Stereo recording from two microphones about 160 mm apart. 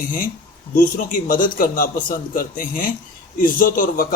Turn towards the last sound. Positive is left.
turn(degrees=65)  # may be behind; listen again after turning